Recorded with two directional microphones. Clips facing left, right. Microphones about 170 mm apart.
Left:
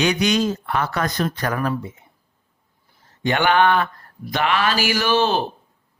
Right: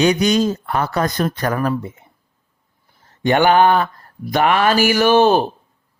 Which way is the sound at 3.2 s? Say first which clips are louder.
Right 5 dB; 45° right (ahead or behind).